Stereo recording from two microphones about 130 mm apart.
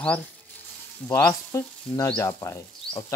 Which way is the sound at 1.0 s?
25° left (ahead or behind).